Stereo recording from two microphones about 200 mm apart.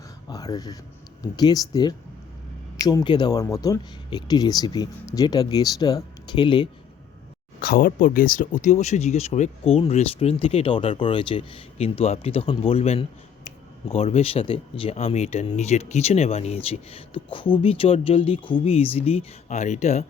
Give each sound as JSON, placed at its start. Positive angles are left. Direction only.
{"t": 0.3, "sound": "a sound", "side_deg": 20}
{"t": 1.2, "sound": "speech", "side_deg": 20}
{"t": 7.6, "sound": "speech", "side_deg": 50}